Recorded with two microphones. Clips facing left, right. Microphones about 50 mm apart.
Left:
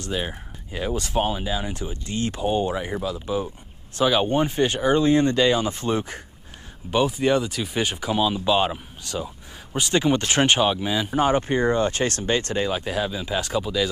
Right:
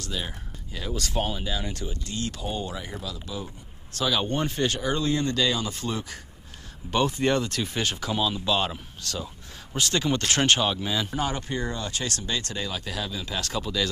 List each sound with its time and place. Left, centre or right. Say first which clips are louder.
0.0 s speech: left 6 dB; left
6.9 s speech: left 3 dB; centre
11.1 s speech: left 8 dB; left; by 13.8 s centre